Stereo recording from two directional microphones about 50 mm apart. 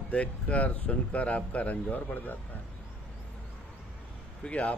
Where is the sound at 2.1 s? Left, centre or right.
Left.